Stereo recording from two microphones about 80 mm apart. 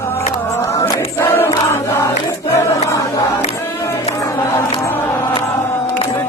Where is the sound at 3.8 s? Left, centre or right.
Left.